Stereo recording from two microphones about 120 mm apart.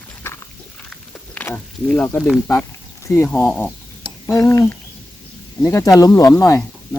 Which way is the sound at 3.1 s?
25° left (ahead or behind).